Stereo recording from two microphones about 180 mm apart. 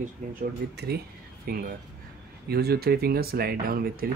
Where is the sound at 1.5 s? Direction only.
55° right (ahead or behind).